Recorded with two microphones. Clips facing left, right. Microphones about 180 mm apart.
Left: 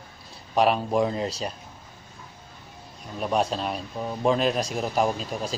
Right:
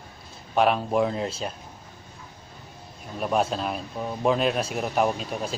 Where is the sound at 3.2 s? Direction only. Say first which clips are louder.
Even; 5° right (ahead or behind).